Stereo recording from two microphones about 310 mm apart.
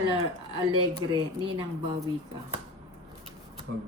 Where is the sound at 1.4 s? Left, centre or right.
Centre.